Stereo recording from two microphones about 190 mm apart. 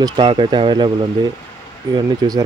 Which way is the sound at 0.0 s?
25° right (ahead or behind).